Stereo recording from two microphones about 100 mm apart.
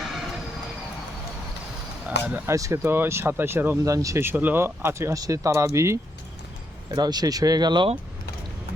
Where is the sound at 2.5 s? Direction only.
30° right (ahead or behind).